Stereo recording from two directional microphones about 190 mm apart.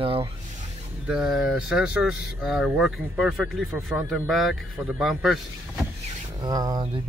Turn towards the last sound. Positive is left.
turn(degrees=-20)  # may be behind; listen again after turning